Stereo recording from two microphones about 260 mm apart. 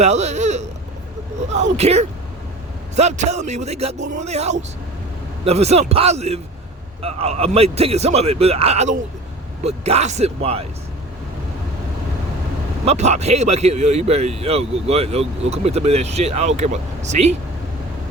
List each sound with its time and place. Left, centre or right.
0.0 s a man's voice: right
12.8 s a man's voice: right